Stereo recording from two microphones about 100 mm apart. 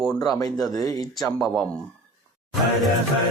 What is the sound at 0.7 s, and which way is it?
Speech, 35° left (ahead or behind).